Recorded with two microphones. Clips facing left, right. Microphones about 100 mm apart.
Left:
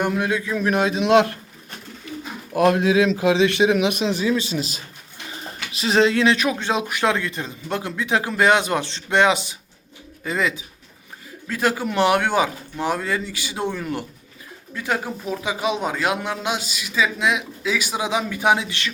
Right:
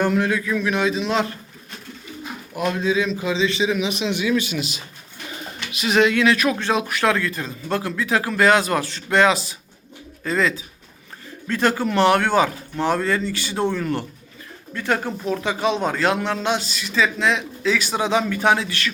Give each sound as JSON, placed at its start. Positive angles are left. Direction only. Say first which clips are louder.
{"t": 0.0, "sound": "speech", "louder": "right 2 dB", "side_deg": 15}
{"t": 0.6, "sound": "speech", "louder": "left 1 dB", "side_deg": 50}
{"t": 2.6, "sound": "speech", "louder": "left 5 dB", "side_deg": 85}
{"t": 4.0, "sound": "a man's voice", "louder": "even", "side_deg": 35}